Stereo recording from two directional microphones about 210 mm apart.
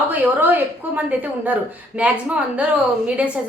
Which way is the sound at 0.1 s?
10° right (ahead or behind).